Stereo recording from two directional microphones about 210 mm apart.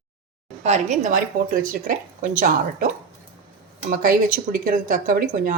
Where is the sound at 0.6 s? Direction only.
35° right (ahead or behind).